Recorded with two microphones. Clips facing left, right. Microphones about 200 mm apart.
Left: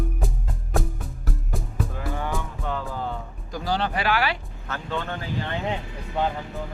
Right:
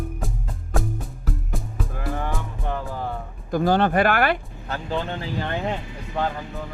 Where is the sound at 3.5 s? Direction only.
55° right (ahead or behind).